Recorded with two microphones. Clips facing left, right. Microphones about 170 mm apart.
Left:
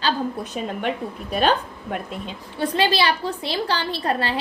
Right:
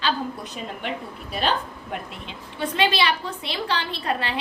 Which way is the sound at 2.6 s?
35° left (ahead or behind).